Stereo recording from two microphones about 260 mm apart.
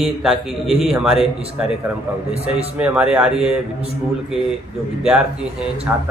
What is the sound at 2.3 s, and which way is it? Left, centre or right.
Speech, right.